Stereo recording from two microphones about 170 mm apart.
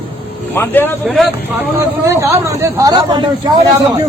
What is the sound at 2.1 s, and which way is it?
Speech, 15° right (ahead or behind).